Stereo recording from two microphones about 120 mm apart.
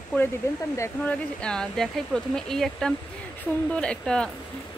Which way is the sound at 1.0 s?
5° left (ahead or behind).